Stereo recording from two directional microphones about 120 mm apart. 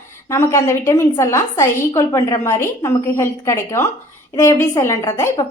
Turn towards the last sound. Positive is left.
turn(degrees=25)  # may be behind; listen again after turning